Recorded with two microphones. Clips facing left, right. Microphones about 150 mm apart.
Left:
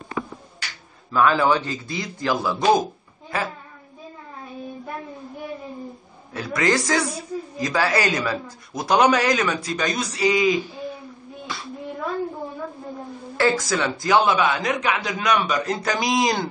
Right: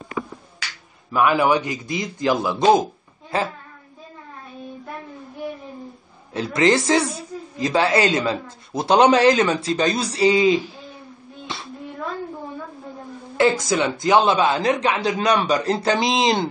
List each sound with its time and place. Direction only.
1.1 s a man's voice: 15° right (ahead or behind)
6.3 s a woman's voice: 25° right (ahead or behind)
11.5 s child singing: 25° right (ahead or behind)
13.4 s a woman's voice: 20° right (ahead or behind)